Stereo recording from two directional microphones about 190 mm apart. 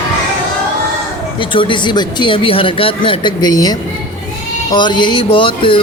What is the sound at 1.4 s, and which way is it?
Speech, 25° left (ahead or behind).